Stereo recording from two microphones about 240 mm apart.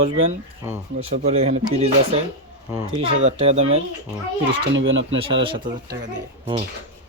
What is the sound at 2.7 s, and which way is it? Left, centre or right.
Speech, centre.